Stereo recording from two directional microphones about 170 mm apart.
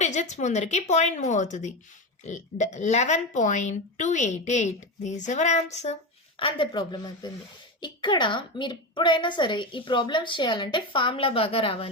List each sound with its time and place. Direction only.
0.0 s a woman's voice: 45° left (ahead or behind)
6.4 s a woman's voice: 25° left (ahead or behind)